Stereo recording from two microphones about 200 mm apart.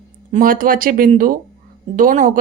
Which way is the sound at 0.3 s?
45° right (ahead or behind).